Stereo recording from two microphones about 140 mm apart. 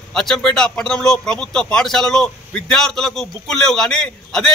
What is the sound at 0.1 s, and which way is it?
A man's voice, 5° left (ahead or behind).